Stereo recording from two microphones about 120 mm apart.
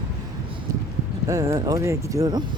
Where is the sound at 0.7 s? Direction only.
25° right (ahead or behind).